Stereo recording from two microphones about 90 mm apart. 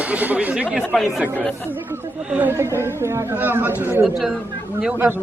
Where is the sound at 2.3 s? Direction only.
20° right (ahead or behind).